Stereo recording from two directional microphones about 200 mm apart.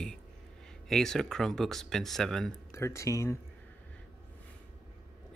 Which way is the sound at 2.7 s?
15° left (ahead or behind).